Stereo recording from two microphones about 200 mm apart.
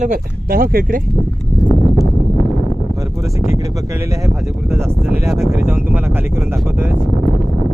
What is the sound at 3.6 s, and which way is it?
Speech, 15° right (ahead or behind).